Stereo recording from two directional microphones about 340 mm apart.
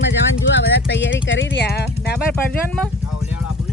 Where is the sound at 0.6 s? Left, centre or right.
Left.